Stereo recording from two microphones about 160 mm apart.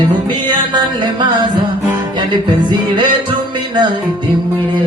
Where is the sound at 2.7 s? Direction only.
30° right (ahead or behind).